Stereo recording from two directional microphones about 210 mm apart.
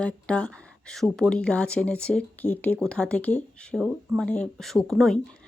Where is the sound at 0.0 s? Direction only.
5° left (ahead or behind).